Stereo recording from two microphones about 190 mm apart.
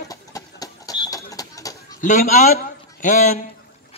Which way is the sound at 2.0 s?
40° left (ahead or behind).